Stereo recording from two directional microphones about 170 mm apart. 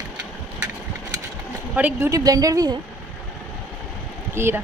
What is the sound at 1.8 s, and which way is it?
A woman's voice, 10° right (ahead or behind).